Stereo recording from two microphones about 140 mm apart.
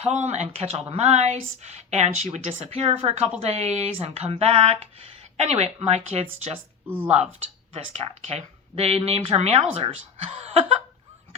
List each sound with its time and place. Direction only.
0.0 s speech: 55° right (ahead or behind)
7.7 s speech: 50° right (ahead or behind)